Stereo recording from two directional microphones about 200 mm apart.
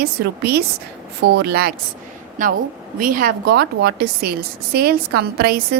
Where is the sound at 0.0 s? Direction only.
50° right (ahead or behind).